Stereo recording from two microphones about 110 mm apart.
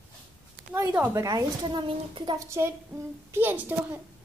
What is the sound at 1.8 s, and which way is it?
Speech, 55° right (ahead or behind).